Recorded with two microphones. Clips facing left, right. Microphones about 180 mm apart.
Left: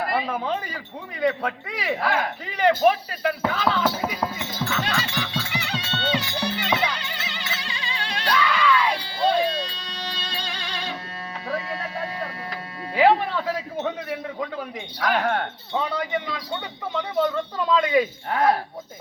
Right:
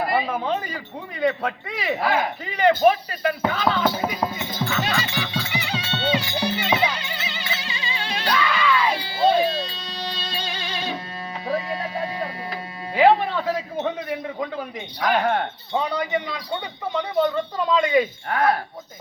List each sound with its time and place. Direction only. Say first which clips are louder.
0.0 s speech: right 2 dB; 5° right (ahead or behind)
2.6 s speech: right 2 dB; 5° left (ahead or behind)
3.8 s speech: right 2 dB; 10° right (ahead or behind)
4.6 s music: right 2 dB; 10° right (ahead or behind)
11.4 s tick-tock: right 4 dB; 15° right (ahead or behind)
12.9 s music: right 2 dB; centre (ahead or behind)
15.2 s speech: right 2 dB; 10° right (ahead or behind)
16.9 s speech: right 2 dB; centre (ahead or behind)
18.3 s speech: even; 20° left (ahead or behind)